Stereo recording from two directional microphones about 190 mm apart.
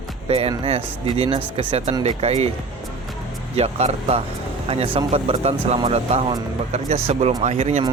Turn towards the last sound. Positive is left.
turn(degrees=-35)  # may be behind; listen again after turning